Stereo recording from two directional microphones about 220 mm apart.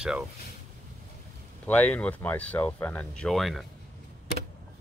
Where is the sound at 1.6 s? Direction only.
5° left (ahead or behind).